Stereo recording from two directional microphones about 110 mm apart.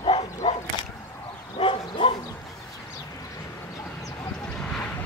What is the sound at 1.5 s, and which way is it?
Bow-wow, 55° left (ahead or behind).